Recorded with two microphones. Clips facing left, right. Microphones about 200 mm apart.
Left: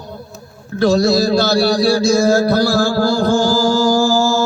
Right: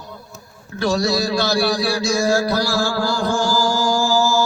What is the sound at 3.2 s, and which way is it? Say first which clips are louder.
Speech: left 5 dB; 35° left (ahead or behind).